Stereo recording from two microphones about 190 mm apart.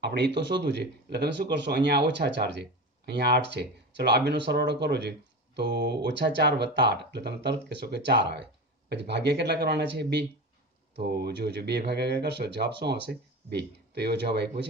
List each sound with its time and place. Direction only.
0.0 s speech: 60° right (ahead or behind)